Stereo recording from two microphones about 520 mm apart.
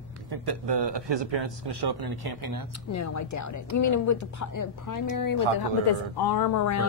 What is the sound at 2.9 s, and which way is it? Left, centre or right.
A woman's voice, left.